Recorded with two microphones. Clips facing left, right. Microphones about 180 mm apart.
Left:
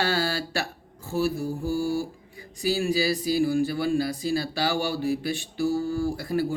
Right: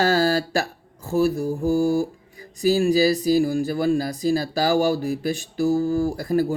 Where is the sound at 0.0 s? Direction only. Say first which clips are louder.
Right 7 dB; 45° right (ahead or behind).